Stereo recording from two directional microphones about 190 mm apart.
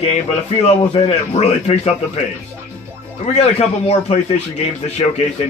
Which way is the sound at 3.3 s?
35° left (ahead or behind).